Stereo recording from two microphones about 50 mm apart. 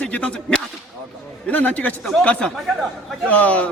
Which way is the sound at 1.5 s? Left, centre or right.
Left.